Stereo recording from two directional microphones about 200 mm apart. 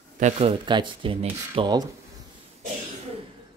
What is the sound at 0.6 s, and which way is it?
Speech, 25° right (ahead or behind).